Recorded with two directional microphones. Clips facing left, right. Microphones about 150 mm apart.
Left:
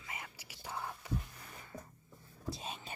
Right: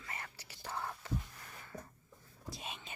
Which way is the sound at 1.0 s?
10° left (ahead or behind).